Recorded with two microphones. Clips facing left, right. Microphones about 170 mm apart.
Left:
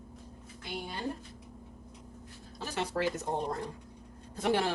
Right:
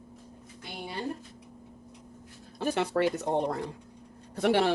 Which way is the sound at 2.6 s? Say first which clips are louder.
Right 6 dB; 60° right (ahead or behind).